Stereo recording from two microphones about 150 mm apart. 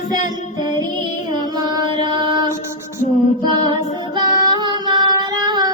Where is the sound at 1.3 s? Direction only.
30° right (ahead or behind).